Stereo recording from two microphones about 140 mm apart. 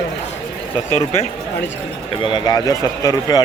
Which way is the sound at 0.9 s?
50° left (ahead or behind).